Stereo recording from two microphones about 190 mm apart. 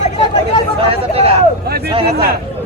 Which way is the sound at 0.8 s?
30° right (ahead or behind).